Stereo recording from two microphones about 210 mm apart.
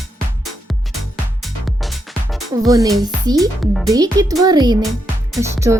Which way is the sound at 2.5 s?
15° right (ahead or behind).